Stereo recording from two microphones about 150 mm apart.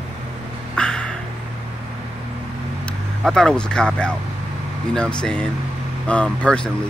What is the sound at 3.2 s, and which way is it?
Speech, 5° left (ahead or behind).